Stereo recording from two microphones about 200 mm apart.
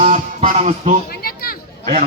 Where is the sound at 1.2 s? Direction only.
50° left (ahead or behind).